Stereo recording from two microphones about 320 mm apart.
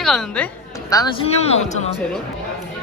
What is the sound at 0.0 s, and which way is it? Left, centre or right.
Speech, centre.